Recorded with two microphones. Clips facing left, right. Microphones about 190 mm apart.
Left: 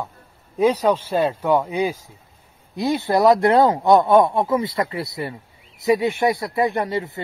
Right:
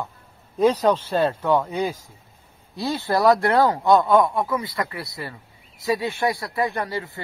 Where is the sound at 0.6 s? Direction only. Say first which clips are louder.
Left 1 dB; 10° left (ahead or behind).